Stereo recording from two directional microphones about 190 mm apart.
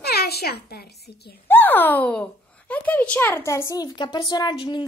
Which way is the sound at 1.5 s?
10° left (ahead or behind).